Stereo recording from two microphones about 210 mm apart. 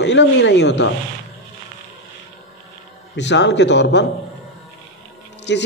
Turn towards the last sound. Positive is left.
turn(degrees=55)  # may be behind; listen again after turning